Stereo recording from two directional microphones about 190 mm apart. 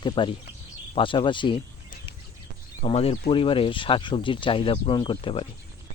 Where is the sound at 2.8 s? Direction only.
30° left (ahead or behind).